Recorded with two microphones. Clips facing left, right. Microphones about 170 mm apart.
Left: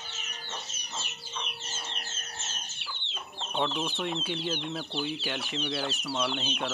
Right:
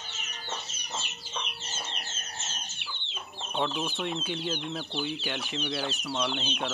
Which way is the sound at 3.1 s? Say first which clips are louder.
Even; centre (ahead or behind).